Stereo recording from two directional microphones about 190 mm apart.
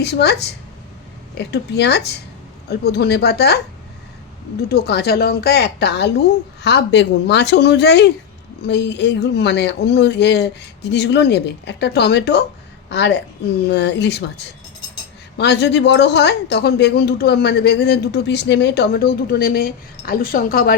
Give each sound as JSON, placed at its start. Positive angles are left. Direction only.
{"t": 0.0, "sound": "a woman's voice", "side_deg": 60}
{"t": 4.7, "sound": "a woman's voice", "side_deg": 55}
{"t": 15.4, "sound": "a woman's voice", "side_deg": 65}